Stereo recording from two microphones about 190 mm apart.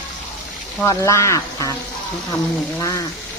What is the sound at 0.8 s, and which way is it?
Speech, 15° left (ahead or behind).